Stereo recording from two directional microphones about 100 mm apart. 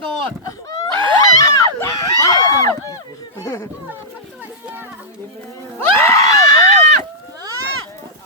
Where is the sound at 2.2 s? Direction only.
35° left (ahead or behind).